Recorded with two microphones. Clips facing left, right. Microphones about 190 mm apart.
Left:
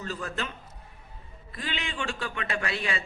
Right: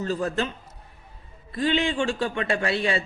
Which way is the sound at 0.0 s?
35° right (ahead or behind).